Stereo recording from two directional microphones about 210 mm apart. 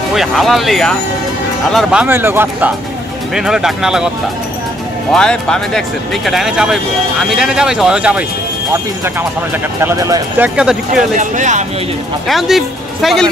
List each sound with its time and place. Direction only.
0.1 s speech: centre (ahead or behind)
5.1 s speech: 5° left (ahead or behind)
9.8 s speech: 15° right (ahead or behind)
10.5 s speech: 5° right (ahead or behind)
11.1 s speech: 35° right (ahead or behind)
12.3 s speech: centre (ahead or behind)